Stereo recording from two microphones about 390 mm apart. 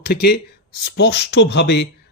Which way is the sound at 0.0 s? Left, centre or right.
Left.